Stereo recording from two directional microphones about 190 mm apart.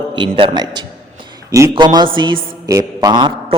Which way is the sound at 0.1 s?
25° right (ahead or behind).